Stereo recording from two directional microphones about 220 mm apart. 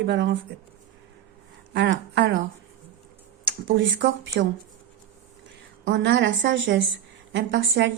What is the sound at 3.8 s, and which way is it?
Speech, 55° right (ahead or behind).